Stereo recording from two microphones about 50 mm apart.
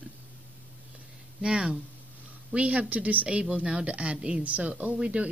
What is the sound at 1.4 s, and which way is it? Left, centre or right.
Speech, right.